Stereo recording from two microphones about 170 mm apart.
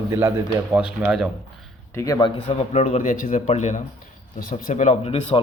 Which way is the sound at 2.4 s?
40° left (ahead or behind).